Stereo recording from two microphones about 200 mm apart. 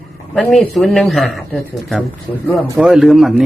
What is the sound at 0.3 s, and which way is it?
A man's voice, 5° left (ahead or behind).